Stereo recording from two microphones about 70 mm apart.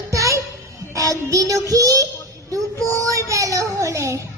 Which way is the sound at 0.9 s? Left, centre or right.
Right.